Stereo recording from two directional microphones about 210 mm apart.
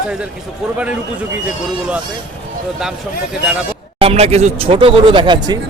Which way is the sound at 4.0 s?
30° right (ahead or behind).